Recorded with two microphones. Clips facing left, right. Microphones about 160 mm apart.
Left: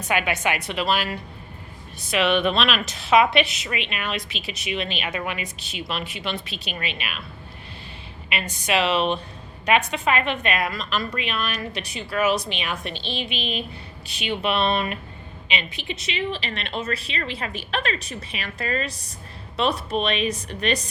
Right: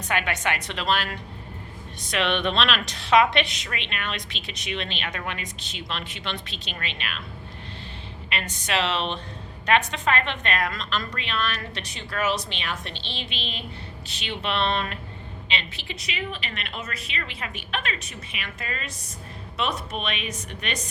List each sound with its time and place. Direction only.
0.1 s a woman's voice: 10° left (ahead or behind)
8.3 s a woman's voice: 10° left (ahead or behind); by 20.9 s 35° left (ahead or behind)